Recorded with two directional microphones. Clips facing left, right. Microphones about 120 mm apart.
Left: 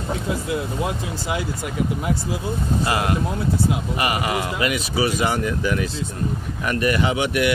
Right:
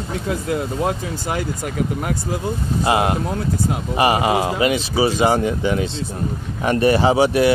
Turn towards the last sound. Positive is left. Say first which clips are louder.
# right 6 dB
turn(degrees=-30)  # may be behind; listen again after turning